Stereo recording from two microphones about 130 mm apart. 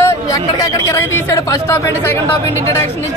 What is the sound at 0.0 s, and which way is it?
Speech, 25° left (ahead or behind).